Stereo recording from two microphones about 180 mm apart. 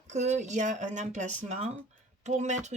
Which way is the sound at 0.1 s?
40° right (ahead or behind).